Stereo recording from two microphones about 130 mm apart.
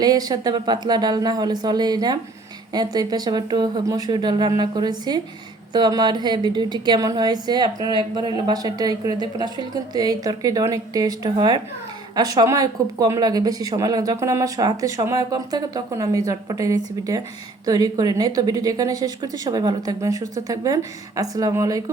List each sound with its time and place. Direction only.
0.0 s a woman's voice: 30° right (ahead or behind)